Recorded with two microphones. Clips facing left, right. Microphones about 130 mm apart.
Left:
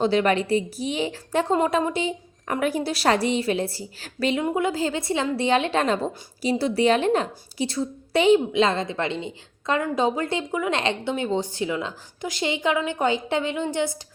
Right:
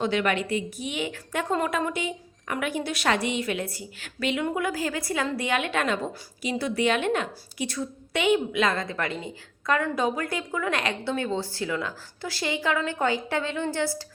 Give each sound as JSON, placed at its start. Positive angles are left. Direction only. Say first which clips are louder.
{"t": 0.0, "sound": "a woman's voice", "louder": "left 5 dB", "side_deg": 35}
{"t": 4.4, "sound": "a woman's voice", "louder": "left 4 dB", "side_deg": 25}